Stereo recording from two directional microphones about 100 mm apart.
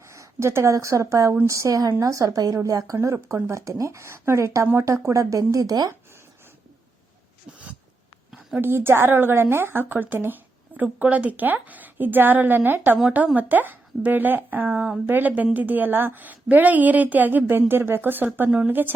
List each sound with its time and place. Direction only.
0.1 s a woman's voice: 30° right (ahead or behind)
8.3 s a sound: 5° right (ahead or behind)
8.6 s a woman's voice: 20° right (ahead or behind)